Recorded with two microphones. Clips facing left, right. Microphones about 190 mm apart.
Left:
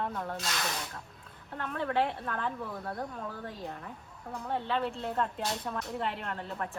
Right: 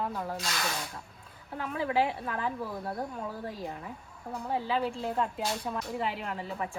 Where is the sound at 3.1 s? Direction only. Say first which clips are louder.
Right 3 dB; 5° right (ahead or behind).